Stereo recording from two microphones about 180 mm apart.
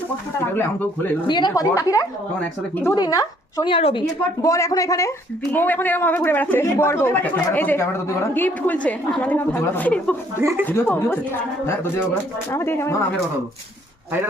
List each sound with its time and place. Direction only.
1.3 s a woman's voice: 25° left (ahead or behind)
2.9 s speech: 20° left (ahead or behind)
4.4 s a woman's voice: 20° left (ahead or behind)
10.3 s speech: 15° right (ahead or behind)
10.7 s a woman's voice: 10° left (ahead or behind)
12.5 s a woman's voice: 15° left (ahead or behind)